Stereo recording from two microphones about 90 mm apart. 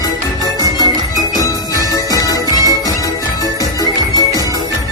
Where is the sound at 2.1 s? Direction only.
45° left (ahead or behind).